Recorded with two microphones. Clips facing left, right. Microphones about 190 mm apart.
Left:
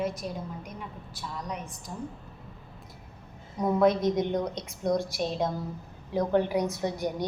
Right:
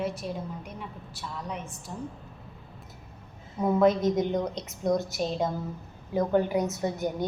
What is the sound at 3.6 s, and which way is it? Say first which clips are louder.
A woman's voice: right 1 dB; 5° right (ahead or behind).